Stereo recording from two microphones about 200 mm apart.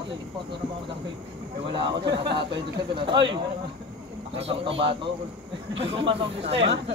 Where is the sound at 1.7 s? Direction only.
25° right (ahead or behind).